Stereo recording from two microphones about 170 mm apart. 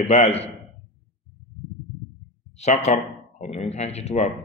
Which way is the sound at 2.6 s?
40° left (ahead or behind).